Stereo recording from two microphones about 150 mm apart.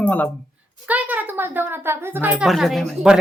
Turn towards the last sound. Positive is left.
turn(degrees=0)  # may be behind; listen again after turning